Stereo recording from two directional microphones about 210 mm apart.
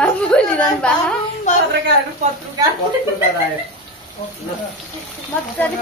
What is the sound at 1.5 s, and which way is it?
Speech, 35° left (ahead or behind).